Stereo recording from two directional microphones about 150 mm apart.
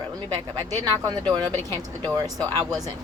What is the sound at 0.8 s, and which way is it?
A woman's voice, 25° right (ahead or behind).